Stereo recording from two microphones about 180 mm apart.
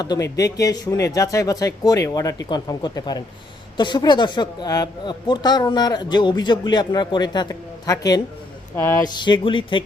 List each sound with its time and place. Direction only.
0.0 s speech: 20° left (ahead or behind)